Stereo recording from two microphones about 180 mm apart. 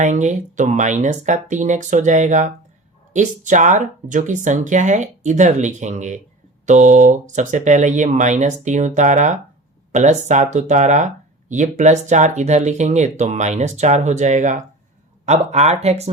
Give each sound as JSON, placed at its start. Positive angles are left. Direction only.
{"t": 0.0, "sound": "speech", "side_deg": -40}